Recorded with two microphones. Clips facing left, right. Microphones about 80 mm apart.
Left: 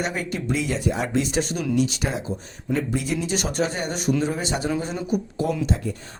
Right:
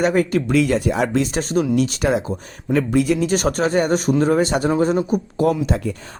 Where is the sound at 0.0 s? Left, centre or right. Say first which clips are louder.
Right 10 dB; right.